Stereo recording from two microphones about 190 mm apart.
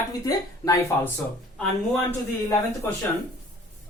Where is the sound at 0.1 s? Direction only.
20° left (ahead or behind).